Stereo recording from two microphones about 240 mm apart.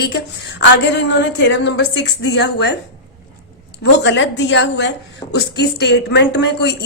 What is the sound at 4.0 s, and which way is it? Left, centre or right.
A woman's voice, left.